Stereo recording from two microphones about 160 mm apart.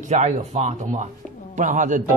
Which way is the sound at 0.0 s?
45° right (ahead or behind).